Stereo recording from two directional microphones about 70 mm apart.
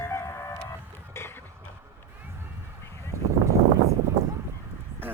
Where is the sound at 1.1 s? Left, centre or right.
Left.